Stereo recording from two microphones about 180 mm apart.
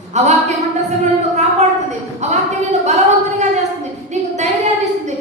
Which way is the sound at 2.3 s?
40° right (ahead or behind).